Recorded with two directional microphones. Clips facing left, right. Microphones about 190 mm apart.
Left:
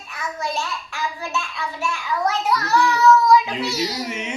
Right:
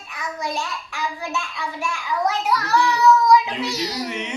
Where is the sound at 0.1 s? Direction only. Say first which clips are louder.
Left 1 dB; 15° right (ahead or behind).